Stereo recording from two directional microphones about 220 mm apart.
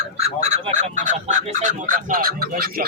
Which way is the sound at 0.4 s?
30° right (ahead or behind).